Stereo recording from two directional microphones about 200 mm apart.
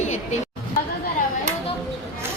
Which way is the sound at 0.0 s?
35° left (ahead or behind).